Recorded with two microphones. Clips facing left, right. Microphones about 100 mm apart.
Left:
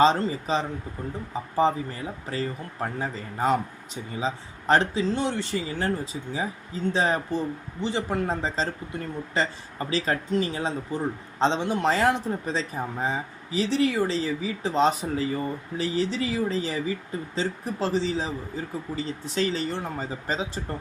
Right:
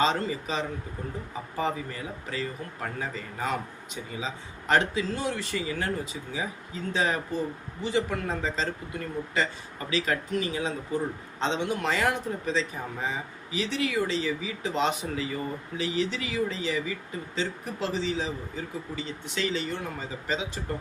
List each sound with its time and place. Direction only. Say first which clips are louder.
0.0 s speech: left 5 dB; 30° left (ahead or behind)